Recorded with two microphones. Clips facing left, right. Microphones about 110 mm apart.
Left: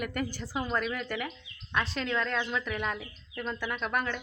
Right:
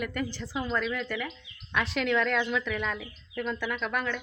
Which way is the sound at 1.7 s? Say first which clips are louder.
Right 3 dB; 35° left (ahead or behind).